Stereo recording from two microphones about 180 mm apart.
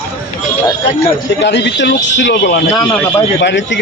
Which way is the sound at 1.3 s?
80° left.